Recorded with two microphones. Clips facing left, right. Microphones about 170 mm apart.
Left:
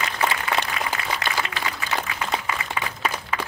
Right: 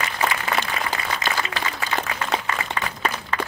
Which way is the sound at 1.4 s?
65° left (ahead or behind).